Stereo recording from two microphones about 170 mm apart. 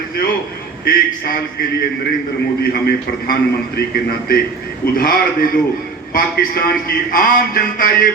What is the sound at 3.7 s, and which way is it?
A man's voice, 65° left (ahead or behind).